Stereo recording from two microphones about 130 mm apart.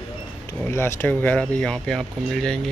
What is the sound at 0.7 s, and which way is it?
Speech, 20° left (ahead or behind).